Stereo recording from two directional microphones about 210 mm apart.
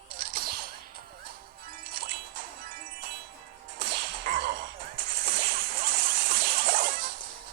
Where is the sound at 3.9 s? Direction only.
50° right (ahead or behind).